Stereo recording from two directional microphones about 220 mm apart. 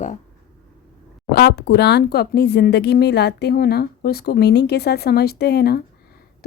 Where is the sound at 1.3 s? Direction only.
50° left (ahead or behind).